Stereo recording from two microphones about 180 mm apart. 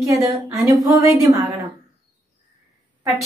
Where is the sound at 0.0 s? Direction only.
20° right (ahead or behind).